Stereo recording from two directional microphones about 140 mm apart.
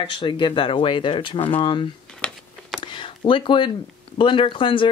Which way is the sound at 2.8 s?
35° left (ahead or behind).